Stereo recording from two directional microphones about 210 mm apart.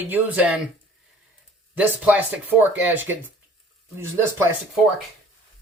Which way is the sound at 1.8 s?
10° right (ahead or behind).